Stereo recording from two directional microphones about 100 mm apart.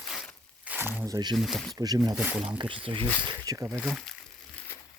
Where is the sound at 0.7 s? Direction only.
20° right (ahead or behind).